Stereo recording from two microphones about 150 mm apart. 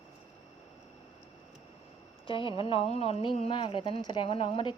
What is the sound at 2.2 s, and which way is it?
Speech, 35° left (ahead or behind).